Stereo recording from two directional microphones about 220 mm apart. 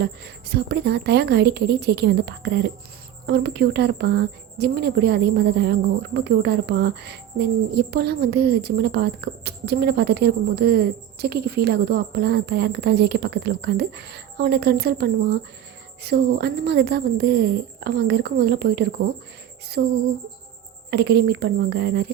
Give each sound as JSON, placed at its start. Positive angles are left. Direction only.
{"t": 0.0, "sound": "speech", "side_deg": -45}